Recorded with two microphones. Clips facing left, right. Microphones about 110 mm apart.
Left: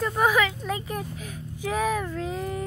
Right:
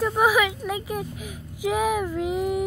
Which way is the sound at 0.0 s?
5° right (ahead or behind).